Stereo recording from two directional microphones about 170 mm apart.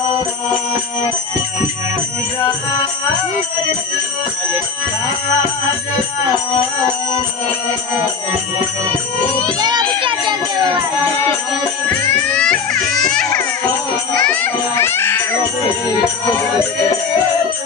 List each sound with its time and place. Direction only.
9.6 s children playing: 25° right (ahead or behind)
12.3 s speech: 5° left (ahead or behind)
14.1 s music: 5° left (ahead or behind)